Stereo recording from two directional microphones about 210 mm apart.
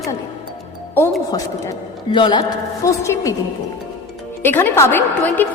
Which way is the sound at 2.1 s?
20° left (ahead or behind).